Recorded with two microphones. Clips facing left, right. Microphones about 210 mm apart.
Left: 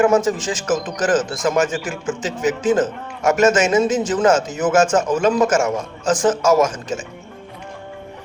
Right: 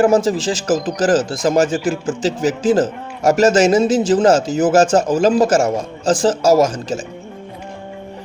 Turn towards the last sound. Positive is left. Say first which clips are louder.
# right 3 dB
turn(degrees=-35)  # may be behind; listen again after turning